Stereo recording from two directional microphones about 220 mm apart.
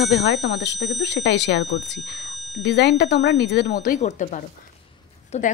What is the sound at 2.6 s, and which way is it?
Speech, 50° left (ahead or behind).